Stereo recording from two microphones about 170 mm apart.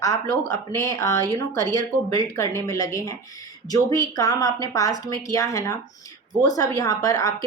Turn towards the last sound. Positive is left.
turn(degrees=20)  # may be behind; listen again after turning